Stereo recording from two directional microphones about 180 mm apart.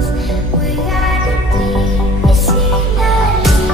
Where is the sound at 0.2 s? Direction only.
Centre (ahead or behind).